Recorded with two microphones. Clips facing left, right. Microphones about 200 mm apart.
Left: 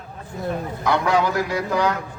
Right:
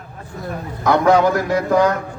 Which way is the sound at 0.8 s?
45° right (ahead or behind).